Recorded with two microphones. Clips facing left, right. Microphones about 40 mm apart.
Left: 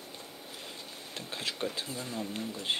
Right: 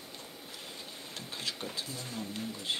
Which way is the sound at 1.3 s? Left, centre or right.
Left.